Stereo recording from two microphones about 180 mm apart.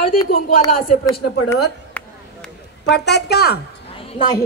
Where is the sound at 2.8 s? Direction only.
70° left (ahead or behind).